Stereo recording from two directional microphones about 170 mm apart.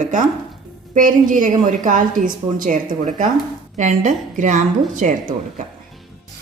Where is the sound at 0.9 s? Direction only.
50° right (ahead or behind).